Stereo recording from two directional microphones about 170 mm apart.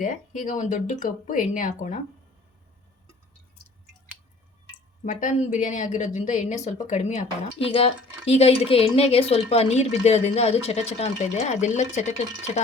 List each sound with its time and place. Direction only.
0.0 s speech: 50° left (ahead or behind)
5.0 s speech: 50° left (ahead or behind)